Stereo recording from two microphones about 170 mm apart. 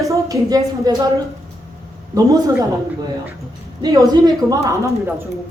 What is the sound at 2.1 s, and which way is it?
A woman's voice, 20° right (ahead or behind).